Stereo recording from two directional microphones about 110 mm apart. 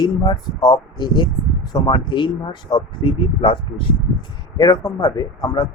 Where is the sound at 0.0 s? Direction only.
40° left (ahead or behind).